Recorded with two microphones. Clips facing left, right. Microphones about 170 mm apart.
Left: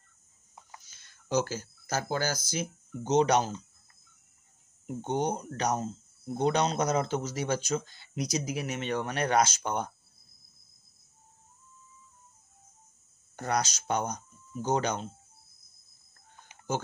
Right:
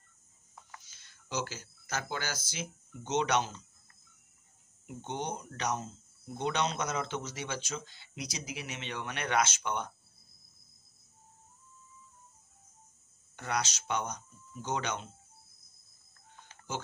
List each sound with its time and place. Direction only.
0.8 s speech: 45° left (ahead or behind)
4.8 s speech: 40° left (ahead or behind)
13.4 s speech: 40° left (ahead or behind)